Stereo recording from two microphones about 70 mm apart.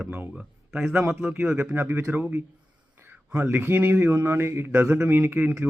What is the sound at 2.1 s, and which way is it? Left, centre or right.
Speech, right.